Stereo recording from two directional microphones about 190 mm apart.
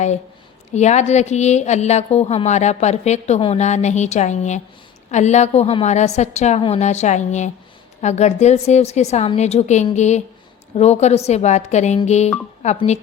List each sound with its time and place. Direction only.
0.7 s a woman's voice: 35° left (ahead or behind)